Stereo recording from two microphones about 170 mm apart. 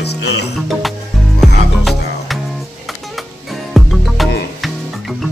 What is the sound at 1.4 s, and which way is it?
Music, centre (ahead or behind).